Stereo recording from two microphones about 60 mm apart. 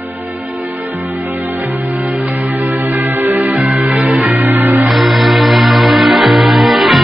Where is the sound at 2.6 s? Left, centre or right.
Right.